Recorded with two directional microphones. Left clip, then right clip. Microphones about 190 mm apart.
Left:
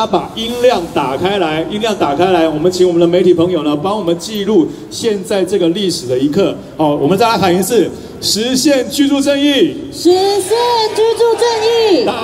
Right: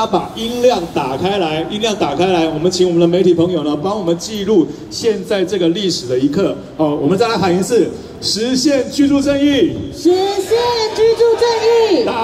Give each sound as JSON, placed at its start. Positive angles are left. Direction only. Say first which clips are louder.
{"t": 0.1, "sound": "a man's voice", "louder": "left 2 dB", "side_deg": -5}
{"t": 4.4, "sound": "a man's voice", "louder": "left 1 dB", "side_deg": 0}